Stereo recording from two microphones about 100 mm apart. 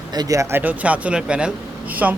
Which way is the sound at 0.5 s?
15° right (ahead or behind).